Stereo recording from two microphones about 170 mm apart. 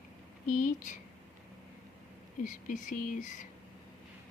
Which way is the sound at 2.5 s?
50° left (ahead or behind).